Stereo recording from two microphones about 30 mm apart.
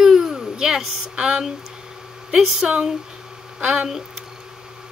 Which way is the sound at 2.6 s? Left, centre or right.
Right.